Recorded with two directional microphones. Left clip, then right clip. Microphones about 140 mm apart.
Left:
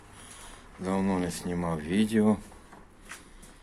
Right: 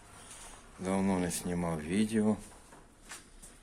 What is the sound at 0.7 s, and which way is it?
Speech, 20° right (ahead or behind).